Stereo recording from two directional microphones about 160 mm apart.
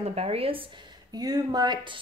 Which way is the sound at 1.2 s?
25° right (ahead or behind).